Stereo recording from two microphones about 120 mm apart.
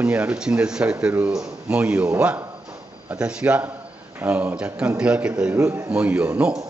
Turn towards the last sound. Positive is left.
turn(degrees=-10)  # may be behind; listen again after turning